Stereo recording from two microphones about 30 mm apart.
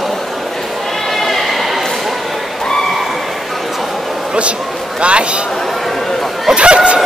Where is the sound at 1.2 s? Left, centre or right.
Centre.